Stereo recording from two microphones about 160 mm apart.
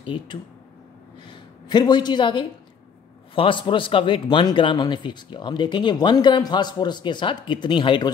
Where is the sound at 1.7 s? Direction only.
25° left (ahead or behind).